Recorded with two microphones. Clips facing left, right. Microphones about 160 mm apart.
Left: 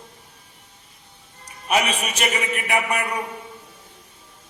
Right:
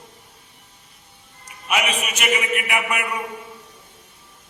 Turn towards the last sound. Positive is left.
turn(degrees=35)  # may be behind; listen again after turning